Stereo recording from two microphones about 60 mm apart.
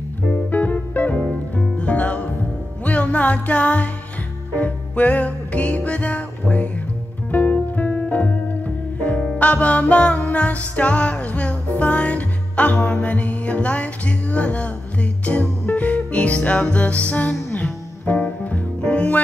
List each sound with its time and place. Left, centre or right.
0.5 s music: left